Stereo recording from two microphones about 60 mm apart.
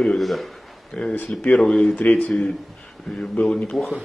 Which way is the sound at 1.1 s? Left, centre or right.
Left.